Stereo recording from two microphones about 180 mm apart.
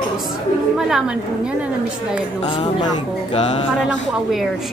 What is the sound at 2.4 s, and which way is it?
Music, 30° left (ahead or behind).